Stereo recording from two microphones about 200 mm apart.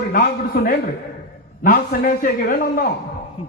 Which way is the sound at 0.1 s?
45° left (ahead or behind).